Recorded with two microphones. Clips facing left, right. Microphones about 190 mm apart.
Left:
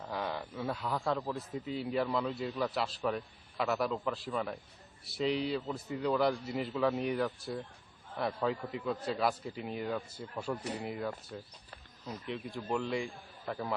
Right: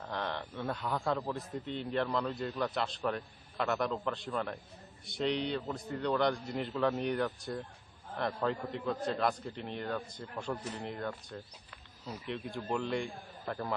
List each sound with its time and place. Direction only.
0.0 s a man's voice: 5° left (ahead or behind)
10.6 s speech: 70° left (ahead or behind)
10.8 s a man's voice: 5° left (ahead or behind)
12.0 s a man's voice: 10° right (ahead or behind)